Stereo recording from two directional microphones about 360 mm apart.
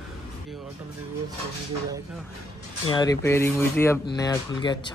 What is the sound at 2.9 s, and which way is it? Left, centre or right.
Speech, centre.